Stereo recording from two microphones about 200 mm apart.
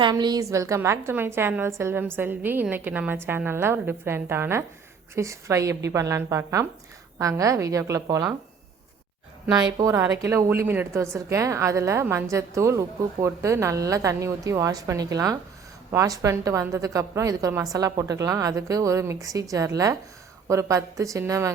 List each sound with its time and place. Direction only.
0.0 s a woman's voice: 20° right (ahead or behind)
9.7 s a woman's voice: 15° right (ahead or behind)